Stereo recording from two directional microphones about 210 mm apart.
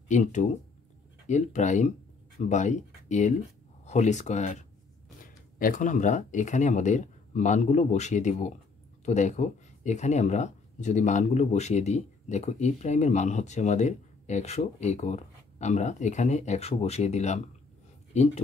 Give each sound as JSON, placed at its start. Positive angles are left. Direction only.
{"t": 0.1, "sound": "speech", "side_deg": 35}